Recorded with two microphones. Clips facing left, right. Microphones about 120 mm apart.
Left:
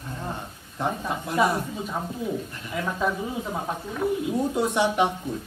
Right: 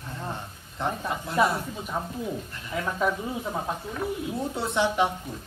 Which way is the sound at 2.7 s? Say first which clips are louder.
Even; centre (ahead or behind).